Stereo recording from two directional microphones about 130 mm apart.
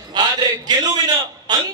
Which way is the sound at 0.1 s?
35° right (ahead or behind).